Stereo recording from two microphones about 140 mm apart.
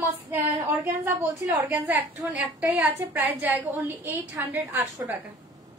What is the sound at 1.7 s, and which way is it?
A woman's voice, 15° right (ahead or behind).